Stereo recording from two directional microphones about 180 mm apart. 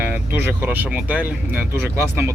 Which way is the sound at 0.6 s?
10° right (ahead or behind).